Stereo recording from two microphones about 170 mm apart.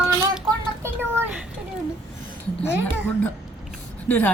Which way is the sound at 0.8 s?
15° right (ahead or behind).